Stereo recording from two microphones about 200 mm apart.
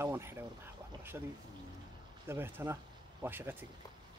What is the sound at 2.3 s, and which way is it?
Speech, 10° right (ahead or behind).